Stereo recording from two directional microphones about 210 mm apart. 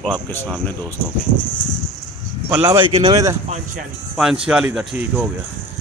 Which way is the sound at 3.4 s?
30° right (ahead or behind).